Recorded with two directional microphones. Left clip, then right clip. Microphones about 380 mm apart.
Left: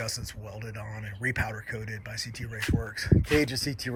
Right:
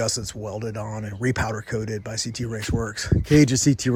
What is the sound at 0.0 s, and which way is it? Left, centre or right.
Speech, centre.